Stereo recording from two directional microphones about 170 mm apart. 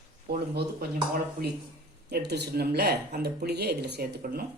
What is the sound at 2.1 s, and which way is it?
Speech, 80° right.